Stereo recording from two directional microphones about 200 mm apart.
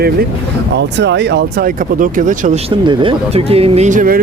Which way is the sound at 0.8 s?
60° right (ahead or behind).